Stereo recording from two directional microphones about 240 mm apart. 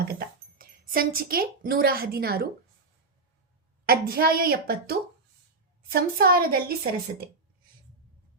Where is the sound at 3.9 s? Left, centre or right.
Right.